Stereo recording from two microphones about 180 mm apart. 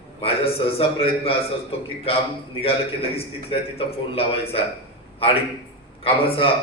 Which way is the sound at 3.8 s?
30° left (ahead or behind).